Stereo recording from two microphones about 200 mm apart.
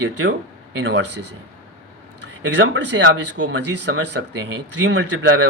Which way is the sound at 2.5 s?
65° right (ahead or behind).